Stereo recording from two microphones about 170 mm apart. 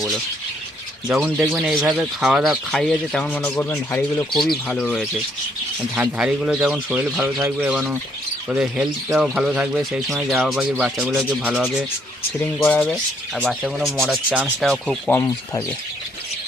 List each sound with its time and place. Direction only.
1.0 s speech: centre (ahead or behind); by 4.3 s 15° left (ahead or behind)
4.3 s speech: centre (ahead or behind)
12.6 s speech: 10° left (ahead or behind); by 14.7 s 5° right (ahead or behind)
14.7 s speech: 5° left (ahead or behind)